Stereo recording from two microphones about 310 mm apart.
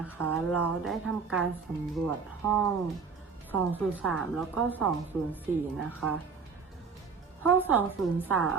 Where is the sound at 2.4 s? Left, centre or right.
Centre.